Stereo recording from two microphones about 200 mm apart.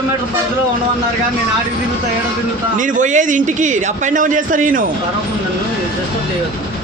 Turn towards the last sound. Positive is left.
turn(degrees=-40)  # may be behind; listen again after turning